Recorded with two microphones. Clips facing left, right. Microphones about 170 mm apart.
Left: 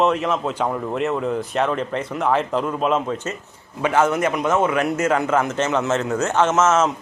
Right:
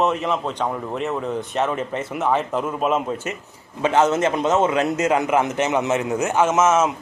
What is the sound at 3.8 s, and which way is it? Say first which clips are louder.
A man's voice: right 1 dB; 20° right (ahead or behind).